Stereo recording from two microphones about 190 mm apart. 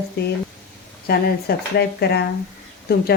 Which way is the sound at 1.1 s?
55° left (ahead or behind).